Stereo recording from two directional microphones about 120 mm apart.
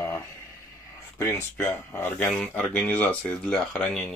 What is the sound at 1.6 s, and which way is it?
Speech, 15° left (ahead or behind).